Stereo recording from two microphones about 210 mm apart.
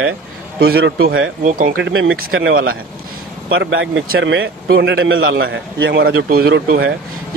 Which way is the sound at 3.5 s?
70° right (ahead or behind).